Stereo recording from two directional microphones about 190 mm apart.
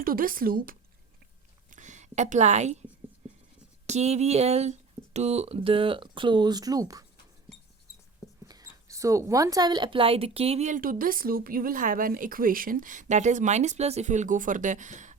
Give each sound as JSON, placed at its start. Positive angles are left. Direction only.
{"t": 0.0, "sound": "speech", "side_deg": -50}
{"t": 1.7, "sound": "a sound", "side_deg": -40}
{"t": 3.8, "sound": "speech", "side_deg": -35}
{"t": 8.4, "sound": "speech", "side_deg": -20}